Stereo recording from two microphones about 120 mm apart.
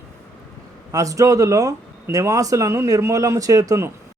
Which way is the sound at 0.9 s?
25° right (ahead or behind).